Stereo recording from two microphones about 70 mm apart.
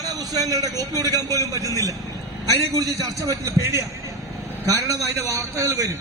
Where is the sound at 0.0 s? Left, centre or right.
Right.